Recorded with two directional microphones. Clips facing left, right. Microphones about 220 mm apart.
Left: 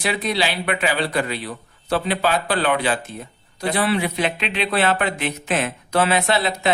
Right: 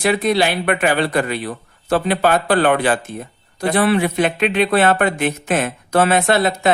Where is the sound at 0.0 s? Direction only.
50° right (ahead or behind).